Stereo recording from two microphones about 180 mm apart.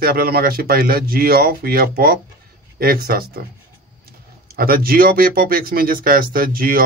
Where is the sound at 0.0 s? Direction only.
55° right (ahead or behind).